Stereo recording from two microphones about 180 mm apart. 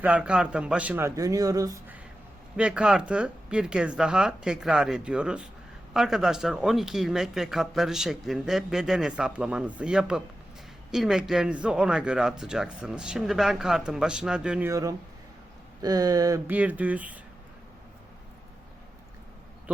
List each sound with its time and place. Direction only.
0.0 s speech: 5° right (ahead or behind)
2.6 s speech: 5° right (ahead or behind)
14.7 s speech: 20° right (ahead or behind)
16.5 s speech: 10° right (ahead or behind)